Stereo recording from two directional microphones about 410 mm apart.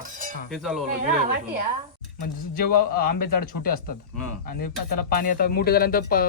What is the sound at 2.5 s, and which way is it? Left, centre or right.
Speech, left.